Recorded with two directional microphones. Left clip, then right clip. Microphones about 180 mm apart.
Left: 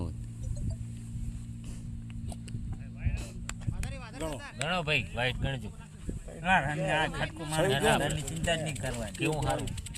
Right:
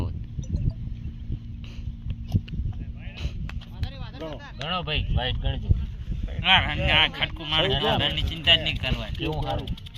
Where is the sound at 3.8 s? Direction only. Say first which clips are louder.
Right 2 dB; 25° right (ahead or behind).